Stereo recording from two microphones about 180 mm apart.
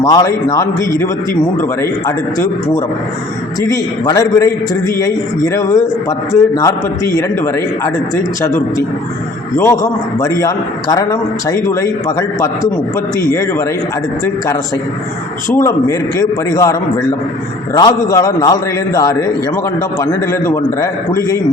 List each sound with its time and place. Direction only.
0.0 s a man's voice: 20° left (ahead or behind)
5.5 s a man's voice: 20° left (ahead or behind)
15.5 s a man's voice: 15° left (ahead or behind)
17.7 s a man's voice: 20° left (ahead or behind)